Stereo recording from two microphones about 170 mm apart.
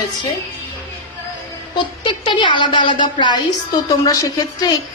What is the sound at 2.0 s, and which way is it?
A woman's voice, 25° left (ahead or behind).